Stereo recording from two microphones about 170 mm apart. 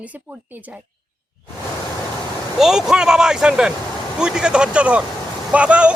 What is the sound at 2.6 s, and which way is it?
Speech, 5° right (ahead or behind).